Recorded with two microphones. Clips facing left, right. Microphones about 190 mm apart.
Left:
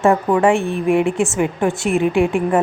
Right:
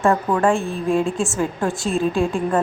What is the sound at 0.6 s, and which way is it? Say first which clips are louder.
Speech: left 4 dB; 65° left (ahead or behind).